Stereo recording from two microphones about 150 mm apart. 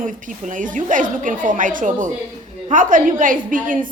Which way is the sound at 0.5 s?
60° right (ahead or behind).